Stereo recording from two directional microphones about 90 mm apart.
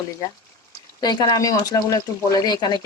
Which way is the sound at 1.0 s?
50° left (ahead or behind).